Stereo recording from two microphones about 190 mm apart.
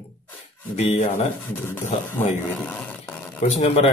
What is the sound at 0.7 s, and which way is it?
Speech, 35° left (ahead or behind).